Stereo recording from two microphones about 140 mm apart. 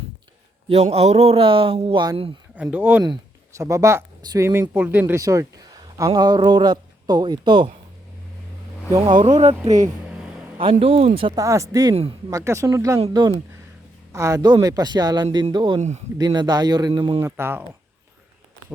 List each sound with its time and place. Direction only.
0.7 s a man's voice: 45° right (ahead or behind)
2.6 s speech: 10° right (ahead or behind)
3.6 s a man's voice: 25° right (ahead or behind)
4.7 s speech: 15° right (ahead or behind)
5.2 s speech: 25° right (ahead or behind)
8.9 s a man's voice: 30° right (ahead or behind)
9.2 s a man's voice: 50° right (ahead or behind)
10.6 s a man's voice: 40° right (ahead or behind)
11.3 s a man's voice: 20° right (ahead or behind)
17.2 s speech: 20° right (ahead or behind)